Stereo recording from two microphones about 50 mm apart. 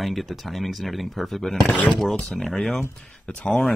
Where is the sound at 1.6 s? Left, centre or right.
Left.